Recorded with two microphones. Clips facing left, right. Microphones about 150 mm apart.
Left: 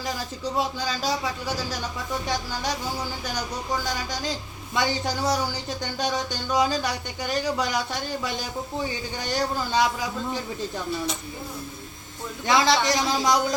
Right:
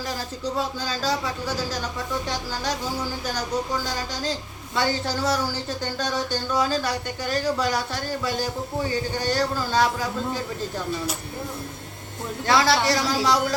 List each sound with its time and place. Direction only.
0.5 s speech: 15° left (ahead or behind)
4.2 s speech: 15° left (ahead or behind)
9.2 s speech: 15° left (ahead or behind)
12.5 s speech: 15° left (ahead or behind)